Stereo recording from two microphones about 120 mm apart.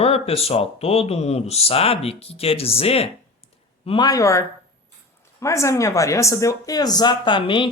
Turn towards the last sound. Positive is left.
turn(degrees=45)  # may be behind; listen again after turning